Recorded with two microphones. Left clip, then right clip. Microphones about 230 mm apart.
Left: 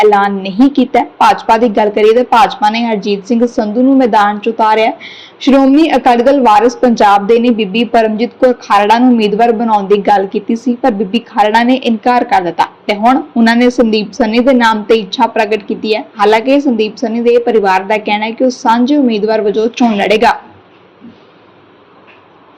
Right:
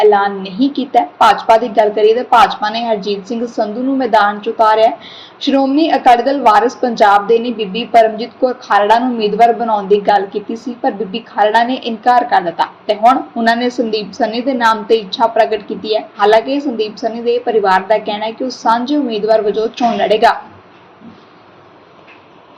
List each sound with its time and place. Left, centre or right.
0.0 s a woman's voice: left
7.4 s a woman's voice: left
7.9 s a woman's voice: left